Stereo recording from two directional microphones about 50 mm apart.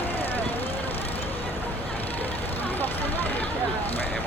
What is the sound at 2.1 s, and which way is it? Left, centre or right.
Vehicle, left.